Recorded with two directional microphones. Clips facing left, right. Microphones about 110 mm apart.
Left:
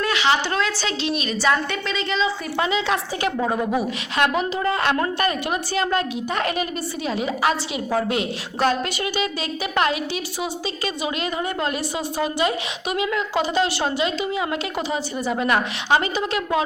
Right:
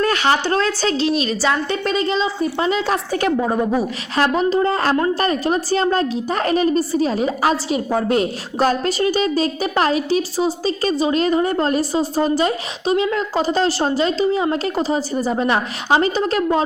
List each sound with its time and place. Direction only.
0.0 s a woman's voice: 40° right (ahead or behind)
3.3 s a woman's voice: 10° right (ahead or behind)
4.2 s a woman's voice: 35° right (ahead or behind)